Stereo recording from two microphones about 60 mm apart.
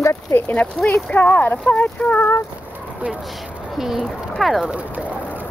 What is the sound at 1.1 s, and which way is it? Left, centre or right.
Speech, left.